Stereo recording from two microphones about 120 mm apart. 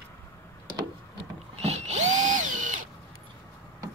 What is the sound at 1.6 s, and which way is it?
Drill, 65° right (ahead or behind).